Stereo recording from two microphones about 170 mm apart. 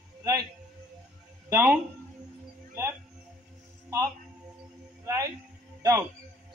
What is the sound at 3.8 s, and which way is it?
Music, 20° right (ahead or behind).